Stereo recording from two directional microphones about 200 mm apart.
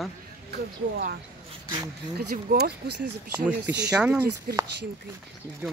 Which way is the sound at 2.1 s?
55° right (ahead or behind).